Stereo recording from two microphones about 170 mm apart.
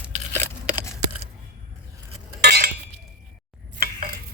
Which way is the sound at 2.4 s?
65° right (ahead or behind).